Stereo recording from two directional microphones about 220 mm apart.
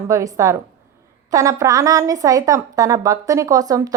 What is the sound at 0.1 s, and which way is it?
A woman's voice, 15° right (ahead or behind).